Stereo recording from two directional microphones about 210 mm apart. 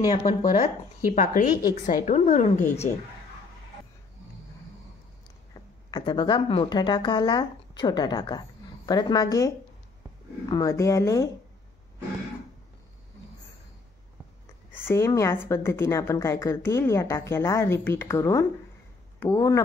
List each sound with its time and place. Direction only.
0.2 s a woman's voice: 35° left (ahead or behind)
1.6 s a woman's voice: 20° left (ahead or behind)
2.0 s a woman's voice: 35° left (ahead or behind)
5.5 s speech: 20° left (ahead or behind)
10.5 s a woman's voice: 15° left (ahead or behind)
14.9 s a woman's voice: 15° left (ahead or behind)